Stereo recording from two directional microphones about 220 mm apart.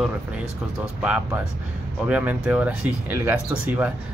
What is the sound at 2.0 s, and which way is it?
Speech, 10° right (ahead or behind).